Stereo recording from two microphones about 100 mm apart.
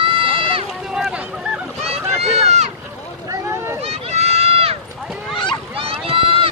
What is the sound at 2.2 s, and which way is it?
Run, 90° right.